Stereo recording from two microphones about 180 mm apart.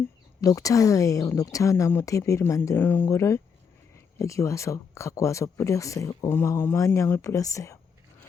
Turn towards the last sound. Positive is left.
turn(degrees=15)  # may be behind; listen again after turning